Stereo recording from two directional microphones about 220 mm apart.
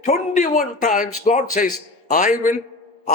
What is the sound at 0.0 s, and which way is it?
A man's voice, 35° left (ahead or behind).